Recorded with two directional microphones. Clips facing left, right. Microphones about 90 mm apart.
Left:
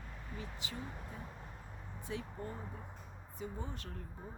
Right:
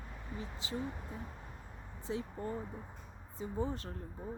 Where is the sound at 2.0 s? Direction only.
30° right (ahead or behind).